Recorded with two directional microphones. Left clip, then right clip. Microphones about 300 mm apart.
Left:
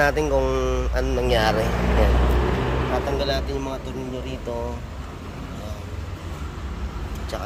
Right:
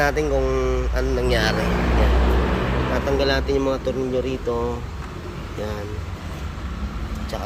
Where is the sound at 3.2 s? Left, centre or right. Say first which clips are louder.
Right 5 dB; centre.